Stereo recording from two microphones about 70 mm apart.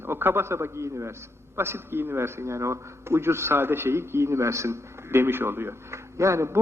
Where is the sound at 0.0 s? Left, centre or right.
Right.